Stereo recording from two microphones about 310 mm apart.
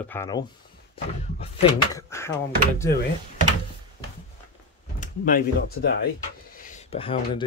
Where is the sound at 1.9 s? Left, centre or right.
Centre.